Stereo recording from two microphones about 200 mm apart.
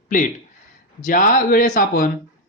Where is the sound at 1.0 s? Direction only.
45° left (ahead or behind).